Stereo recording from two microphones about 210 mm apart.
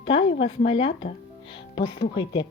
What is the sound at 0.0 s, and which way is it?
Speech, 25° left (ahead or behind).